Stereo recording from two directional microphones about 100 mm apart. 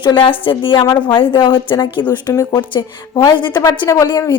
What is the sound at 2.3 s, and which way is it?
Speech, 30° left (ahead or behind).